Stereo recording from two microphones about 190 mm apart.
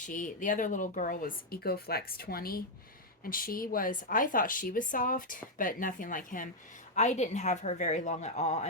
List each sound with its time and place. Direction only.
0.0 s a woman's voice: 45° left (ahead or behind)